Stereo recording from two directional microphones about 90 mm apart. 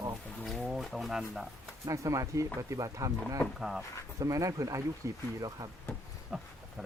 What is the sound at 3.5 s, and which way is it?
Speech, 5° right (ahead or behind).